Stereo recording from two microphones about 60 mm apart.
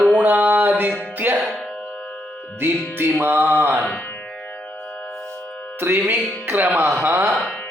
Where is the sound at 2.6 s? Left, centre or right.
Right.